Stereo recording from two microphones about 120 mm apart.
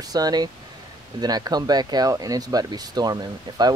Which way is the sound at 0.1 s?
35° right (ahead or behind).